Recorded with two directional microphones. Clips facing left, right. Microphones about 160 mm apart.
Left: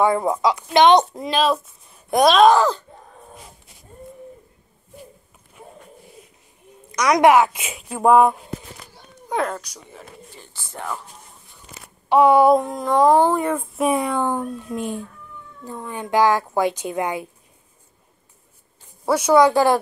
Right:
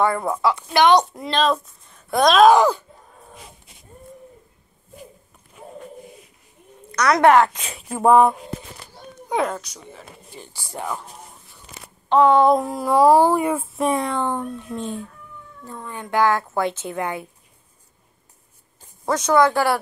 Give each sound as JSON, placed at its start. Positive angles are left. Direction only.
{"t": 0.0, "sound": "a woman's voice", "side_deg": 15}
{"t": 1.3, "sound": "speech", "side_deg": 10}
{"t": 2.5, "sound": "speech", "side_deg": -15}
{"t": 6.9, "sound": "a woman's voice", "side_deg": 15}
{"t": 10.3, "sound": "speech", "side_deg": -15}
{"t": 12.1, "sound": "a woman's voice", "side_deg": 10}
{"t": 12.5, "sound": "a woman's voice", "side_deg": -5}
{"t": 19.0, "sound": "a woman's voice", "side_deg": 10}